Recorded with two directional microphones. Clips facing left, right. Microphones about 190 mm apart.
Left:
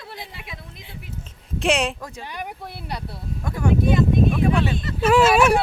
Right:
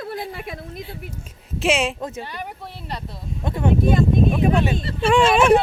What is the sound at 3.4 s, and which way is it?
Speech, 25° right (ahead or behind).